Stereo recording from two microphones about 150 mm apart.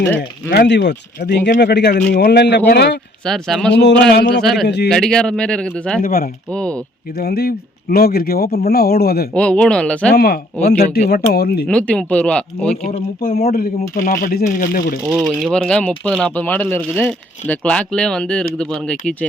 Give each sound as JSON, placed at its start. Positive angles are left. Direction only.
{"t": 1.2, "sound": "speech", "side_deg": 90}
{"t": 3.2, "sound": "speech", "side_deg": 0}
{"t": 4.1, "sound": "speech", "side_deg": 90}
{"t": 4.9, "sound": "speech", "side_deg": 5}
{"t": 6.0, "sound": "speech", "side_deg": 75}
{"t": 6.5, "sound": "speech", "side_deg": 5}
{"t": 7.2, "sound": "speech", "side_deg": 90}
{"t": 9.3, "sound": "speech", "side_deg": 5}
{"t": 10.2, "sound": "speech", "side_deg": 90}
{"t": 11.7, "sound": "speech", "side_deg": 10}
{"t": 13.1, "sound": "speech", "side_deg": 90}
{"t": 13.9, "sound": "speech", "side_deg": 65}
{"t": 15.2, "sound": "speech", "side_deg": 5}